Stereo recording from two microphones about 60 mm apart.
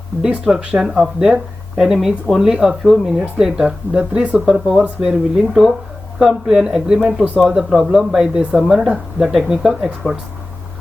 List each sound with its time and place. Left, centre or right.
0.5 s speech: centre
4.8 s speech: right
5.4 s speech: centre